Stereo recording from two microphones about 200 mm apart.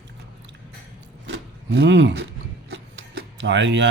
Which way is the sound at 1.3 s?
65° right (ahead or behind).